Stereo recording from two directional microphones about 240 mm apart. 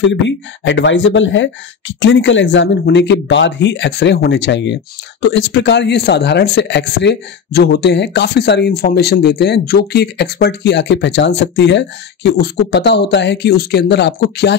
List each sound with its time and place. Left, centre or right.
0.0 s speech: left